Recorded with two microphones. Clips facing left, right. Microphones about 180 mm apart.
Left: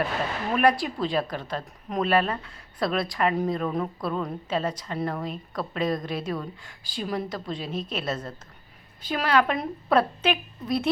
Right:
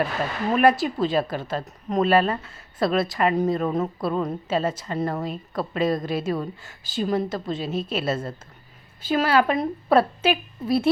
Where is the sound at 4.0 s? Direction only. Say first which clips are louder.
Right 4 dB; 5° right (ahead or behind).